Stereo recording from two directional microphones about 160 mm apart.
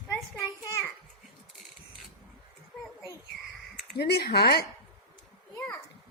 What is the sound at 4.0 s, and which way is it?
Speech, 85° left.